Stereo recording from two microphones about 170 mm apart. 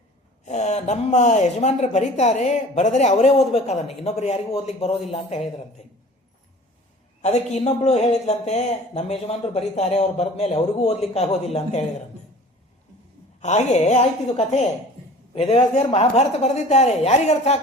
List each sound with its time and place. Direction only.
0.4 s speech: 40° left (ahead or behind)
7.2 s speech: 40° left (ahead or behind)
13.4 s speech: 45° left (ahead or behind)